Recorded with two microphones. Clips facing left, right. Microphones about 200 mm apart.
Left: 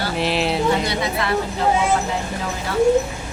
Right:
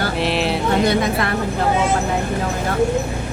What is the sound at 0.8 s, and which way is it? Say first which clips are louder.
Speech: right 4 dB; 50° right (ahead or behind).